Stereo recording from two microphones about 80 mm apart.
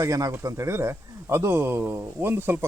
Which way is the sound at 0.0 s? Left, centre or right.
Right.